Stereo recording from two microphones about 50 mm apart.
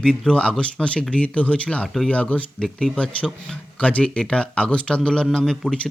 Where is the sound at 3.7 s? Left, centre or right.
Left.